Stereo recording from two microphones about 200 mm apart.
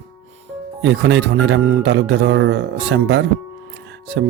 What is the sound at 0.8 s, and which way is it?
Speech, 65° right (ahead or behind).